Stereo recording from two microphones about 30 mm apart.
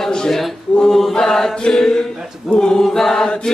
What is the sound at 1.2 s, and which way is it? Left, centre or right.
Chant, centre.